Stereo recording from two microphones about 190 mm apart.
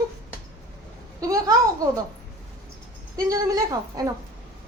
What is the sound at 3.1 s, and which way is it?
Speech, 20° right (ahead or behind).